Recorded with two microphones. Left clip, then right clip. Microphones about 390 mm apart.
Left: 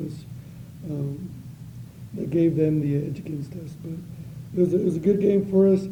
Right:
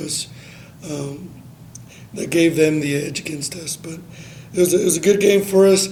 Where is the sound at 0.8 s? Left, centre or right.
Centre.